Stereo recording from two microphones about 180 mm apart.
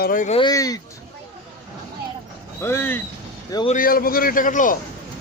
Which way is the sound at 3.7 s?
50° left (ahead or behind).